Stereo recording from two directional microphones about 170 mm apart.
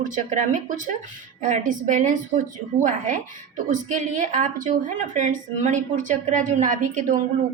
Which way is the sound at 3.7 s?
50° right (ahead or behind).